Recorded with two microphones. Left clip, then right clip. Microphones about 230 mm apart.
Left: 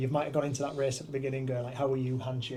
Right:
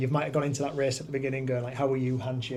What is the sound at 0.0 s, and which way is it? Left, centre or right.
Speech, right.